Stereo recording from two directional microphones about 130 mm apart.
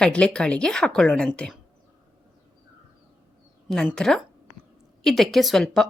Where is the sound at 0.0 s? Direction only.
5° left (ahead or behind).